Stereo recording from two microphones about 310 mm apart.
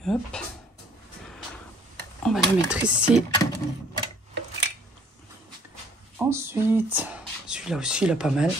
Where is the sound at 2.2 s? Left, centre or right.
Centre.